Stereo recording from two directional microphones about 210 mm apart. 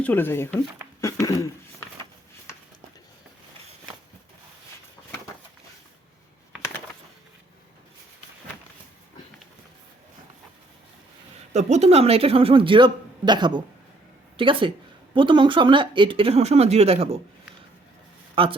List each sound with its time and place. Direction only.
0.0 s speech: 10° left (ahead or behind)
1.0 s a sound: 15° left (ahead or behind)
11.5 s speech: 30° right (ahead or behind)
18.4 s speech: 25° right (ahead or behind)